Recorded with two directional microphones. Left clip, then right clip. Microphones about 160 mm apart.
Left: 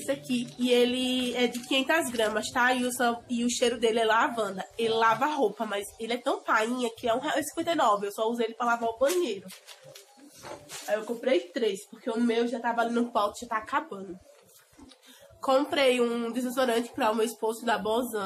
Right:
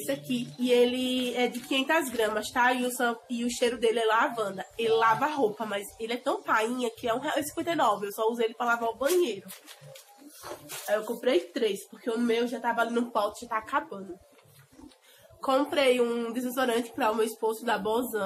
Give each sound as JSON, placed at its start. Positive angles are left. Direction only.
{"t": 0.0, "sound": "a woman's voice", "side_deg": 20}
{"t": 10.9, "sound": "speech", "side_deg": -5}
{"t": 13.1, "sound": "a woman's voice", "side_deg": 20}
{"t": 15.4, "sound": "a woman's voice", "side_deg": 15}